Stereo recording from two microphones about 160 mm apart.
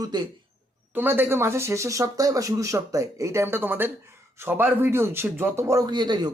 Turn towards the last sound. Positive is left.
turn(degrees=-25)  # may be behind; listen again after turning